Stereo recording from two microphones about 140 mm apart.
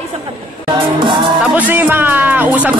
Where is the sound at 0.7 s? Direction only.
35° right (ahead or behind).